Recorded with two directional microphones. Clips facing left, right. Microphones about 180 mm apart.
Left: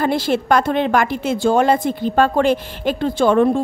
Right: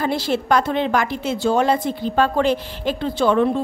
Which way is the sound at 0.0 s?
55° left (ahead or behind).